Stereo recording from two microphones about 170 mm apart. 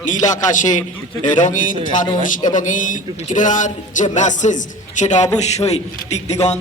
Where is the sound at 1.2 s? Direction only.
50° left (ahead or behind).